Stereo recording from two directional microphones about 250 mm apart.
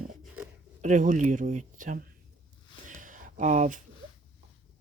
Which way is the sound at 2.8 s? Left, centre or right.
Right.